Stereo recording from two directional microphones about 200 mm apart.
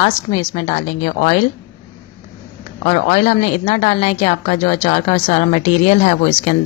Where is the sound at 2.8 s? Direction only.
35° left (ahead or behind).